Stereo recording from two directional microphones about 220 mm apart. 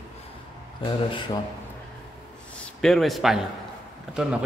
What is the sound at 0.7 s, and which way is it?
Speech, 20° left (ahead or behind).